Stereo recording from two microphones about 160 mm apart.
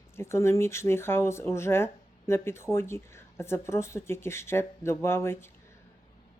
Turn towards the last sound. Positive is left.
turn(degrees=15)  # may be behind; listen again after turning